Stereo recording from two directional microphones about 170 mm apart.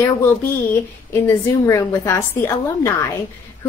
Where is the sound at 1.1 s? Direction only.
15° left (ahead or behind).